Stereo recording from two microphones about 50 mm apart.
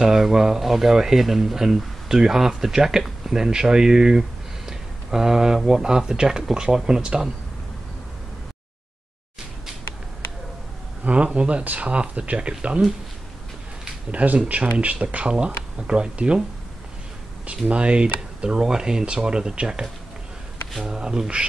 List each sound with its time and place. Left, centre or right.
0.0 s speech: centre
11.1 s speech: right
14.1 s speech: right
17.6 s speech: right